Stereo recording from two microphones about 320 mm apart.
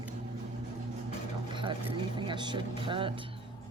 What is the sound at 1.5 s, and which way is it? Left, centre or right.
Speech, centre.